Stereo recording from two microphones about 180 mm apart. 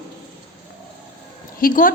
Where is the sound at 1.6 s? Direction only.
50° left (ahead or behind).